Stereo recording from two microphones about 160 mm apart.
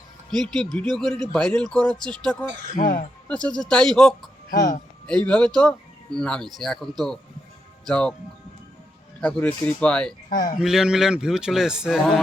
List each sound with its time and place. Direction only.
0.3 s speech: 5° left (ahead or behind)
2.7 s speech: 60° left (ahead or behind)
3.2 s speech: 5° left (ahead or behind)
4.5 s speech: 65° left (ahead or behind)
5.0 s speech: 5° left (ahead or behind)
9.2 s speech: 10° left (ahead or behind)
10.2 s speech: 60° left (ahead or behind)
10.6 s speech: 5° right (ahead or behind)